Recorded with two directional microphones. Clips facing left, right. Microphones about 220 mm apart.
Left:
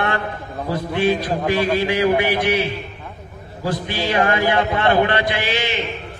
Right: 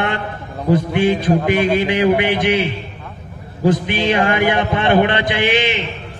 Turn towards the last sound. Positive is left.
turn(degrees=-20)  # may be behind; listen again after turning